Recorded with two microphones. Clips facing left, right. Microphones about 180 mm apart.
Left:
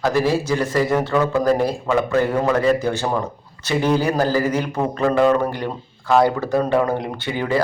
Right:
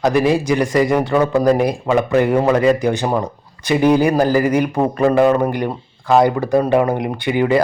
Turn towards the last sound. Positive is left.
turn(degrees=-15)  # may be behind; listen again after turning